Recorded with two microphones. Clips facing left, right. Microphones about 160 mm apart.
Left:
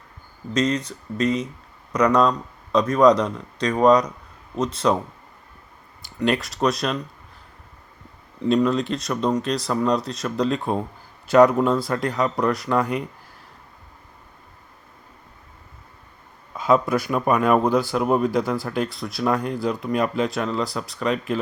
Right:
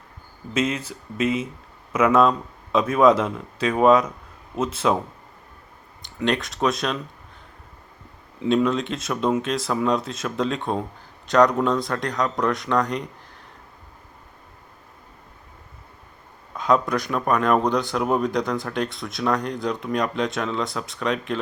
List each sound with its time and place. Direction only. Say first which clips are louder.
0.5 s speech: left 2 dB; 5° right (ahead or behind)
6.0 s speech: left 1 dB; 5° left (ahead or behind)
8.4 s speech: left 1 dB; centre (ahead or behind)
16.6 s speech: left 2 dB; 5° left (ahead or behind)